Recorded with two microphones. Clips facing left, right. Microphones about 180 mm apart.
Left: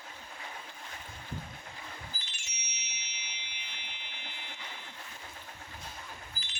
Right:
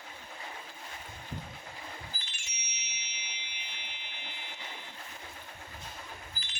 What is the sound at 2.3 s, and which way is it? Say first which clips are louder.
Music: right 1 dB; 55° right (ahead or behind).